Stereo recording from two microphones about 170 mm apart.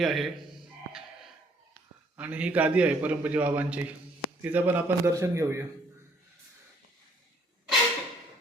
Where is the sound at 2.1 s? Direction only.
10° right (ahead or behind).